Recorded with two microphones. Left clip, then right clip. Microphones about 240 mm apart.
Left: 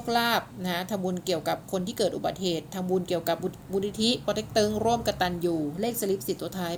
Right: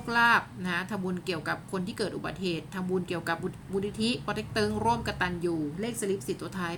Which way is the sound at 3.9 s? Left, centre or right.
Centre.